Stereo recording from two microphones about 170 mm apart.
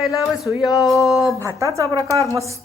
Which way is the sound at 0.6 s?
20° left (ahead or behind).